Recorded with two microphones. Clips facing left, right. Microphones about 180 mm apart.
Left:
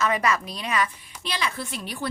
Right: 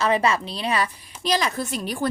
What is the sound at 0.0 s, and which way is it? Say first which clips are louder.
A woman's voice: right 3 dB; 30° right (ahead or behind).